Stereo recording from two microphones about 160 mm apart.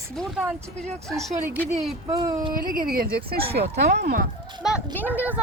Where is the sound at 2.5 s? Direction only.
65° right (ahead or behind); by 4.2 s 80° right.